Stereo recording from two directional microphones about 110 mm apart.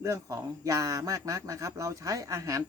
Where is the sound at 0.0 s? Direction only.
30° right (ahead or behind).